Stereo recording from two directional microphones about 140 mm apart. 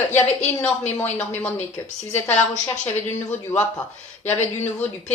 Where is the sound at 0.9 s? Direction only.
15° left (ahead or behind).